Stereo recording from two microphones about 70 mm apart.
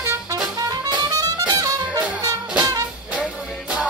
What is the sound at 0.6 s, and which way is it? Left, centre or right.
Music, right.